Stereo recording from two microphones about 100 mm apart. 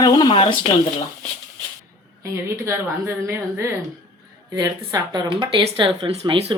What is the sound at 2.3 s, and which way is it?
Speech, 25° right (ahead or behind).